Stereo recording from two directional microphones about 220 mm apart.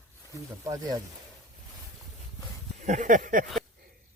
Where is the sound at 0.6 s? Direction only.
15° right (ahead or behind).